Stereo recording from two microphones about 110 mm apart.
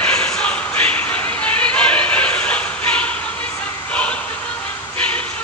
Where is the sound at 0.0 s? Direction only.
10° left (ahead or behind).